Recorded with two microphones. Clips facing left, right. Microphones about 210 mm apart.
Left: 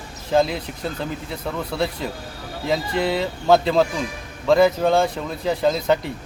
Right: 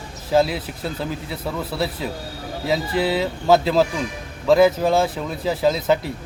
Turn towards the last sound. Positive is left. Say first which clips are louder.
# right 1 dB
turn(degrees=0)  # may be behind; listen again after turning